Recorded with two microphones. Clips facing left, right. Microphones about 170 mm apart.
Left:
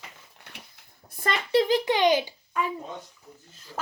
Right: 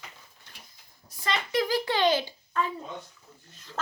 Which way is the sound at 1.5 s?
25° left (ahead or behind).